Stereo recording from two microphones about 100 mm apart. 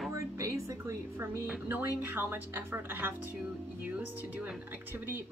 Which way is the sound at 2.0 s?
20° right (ahead or behind).